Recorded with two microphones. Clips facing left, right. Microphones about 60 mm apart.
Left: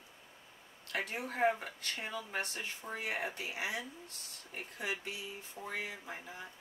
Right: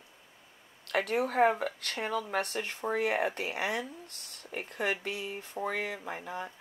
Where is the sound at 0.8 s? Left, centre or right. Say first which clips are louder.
Right 9 dB; right.